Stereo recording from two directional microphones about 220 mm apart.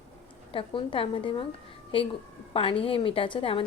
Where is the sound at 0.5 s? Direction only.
25° left (ahead or behind).